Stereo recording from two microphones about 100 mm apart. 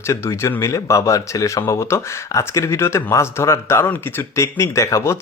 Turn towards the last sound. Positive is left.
turn(degrees=30)  # may be behind; listen again after turning